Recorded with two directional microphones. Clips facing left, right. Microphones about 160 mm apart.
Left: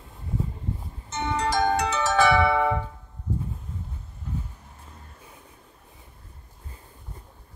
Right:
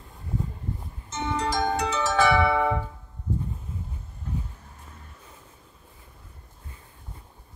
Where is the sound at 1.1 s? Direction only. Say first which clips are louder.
Left 2 dB; 65° left (ahead or behind).